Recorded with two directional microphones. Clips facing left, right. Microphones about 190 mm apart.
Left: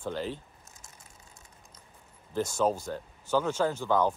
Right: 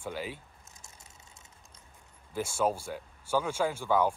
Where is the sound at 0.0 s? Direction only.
10° right (ahead or behind).